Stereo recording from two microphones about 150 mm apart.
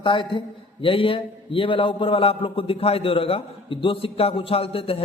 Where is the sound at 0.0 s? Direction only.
35° left (ahead or behind).